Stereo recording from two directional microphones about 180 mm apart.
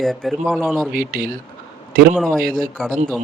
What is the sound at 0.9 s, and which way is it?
Speech, 55° right (ahead or behind).